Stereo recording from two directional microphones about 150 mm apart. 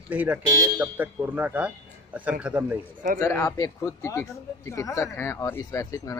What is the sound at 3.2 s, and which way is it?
Speech, 20° left (ahead or behind).